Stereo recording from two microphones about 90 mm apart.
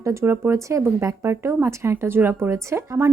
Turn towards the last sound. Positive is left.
turn(degrees=-30)  # may be behind; listen again after turning